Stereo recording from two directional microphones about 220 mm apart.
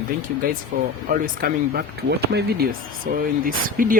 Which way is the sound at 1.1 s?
40° right (ahead or behind).